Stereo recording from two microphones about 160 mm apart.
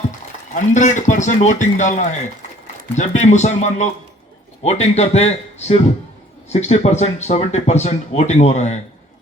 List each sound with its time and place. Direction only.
0.5 s speech: 50° left (ahead or behind)